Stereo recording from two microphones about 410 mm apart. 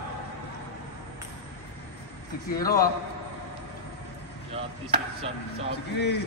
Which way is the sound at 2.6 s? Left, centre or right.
Left.